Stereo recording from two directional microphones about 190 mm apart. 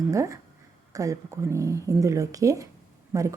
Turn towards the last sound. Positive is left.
turn(degrees=-15)  # may be behind; listen again after turning